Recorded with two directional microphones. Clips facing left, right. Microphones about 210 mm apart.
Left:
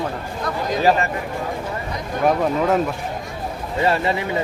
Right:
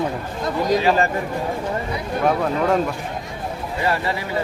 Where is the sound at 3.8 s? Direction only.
25° left (ahead or behind).